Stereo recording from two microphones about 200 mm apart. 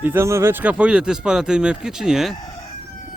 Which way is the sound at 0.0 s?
10° right (ahead or behind).